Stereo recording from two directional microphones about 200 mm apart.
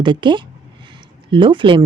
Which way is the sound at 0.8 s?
25° right (ahead or behind).